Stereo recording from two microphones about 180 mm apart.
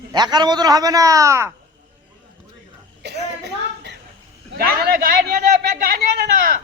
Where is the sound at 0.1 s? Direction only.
25° right (ahead or behind).